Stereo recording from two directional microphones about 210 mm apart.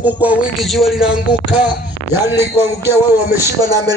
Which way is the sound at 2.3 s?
50° left (ahead or behind).